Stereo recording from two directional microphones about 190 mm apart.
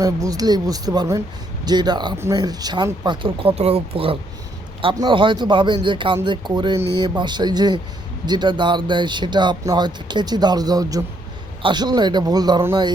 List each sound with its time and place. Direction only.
0.3 s speech: 20° right (ahead or behind)